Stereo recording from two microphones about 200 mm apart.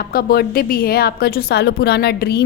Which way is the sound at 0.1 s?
50° left (ahead or behind).